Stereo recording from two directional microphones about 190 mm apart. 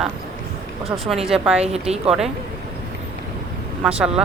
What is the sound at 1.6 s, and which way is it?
Speech, 35° right (ahead or behind).